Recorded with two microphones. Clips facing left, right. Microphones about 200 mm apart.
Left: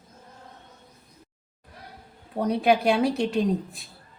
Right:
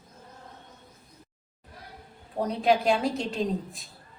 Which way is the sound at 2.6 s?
65° left (ahead or behind).